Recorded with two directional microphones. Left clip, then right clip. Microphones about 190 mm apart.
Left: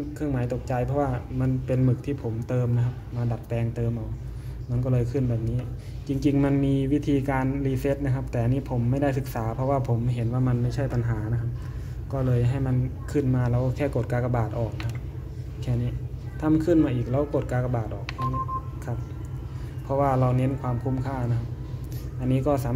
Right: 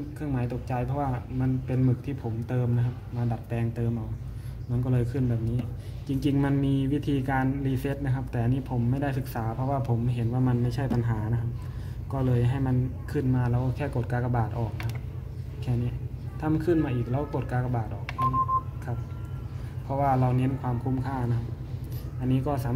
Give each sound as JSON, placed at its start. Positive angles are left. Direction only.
{"t": 0.2, "sound": "speech", "side_deg": 15}
{"t": 16.3, "sound": "speech", "side_deg": 15}
{"t": 19.9, "sound": "speech", "side_deg": 15}
{"t": 22.3, "sound": "speech", "side_deg": 15}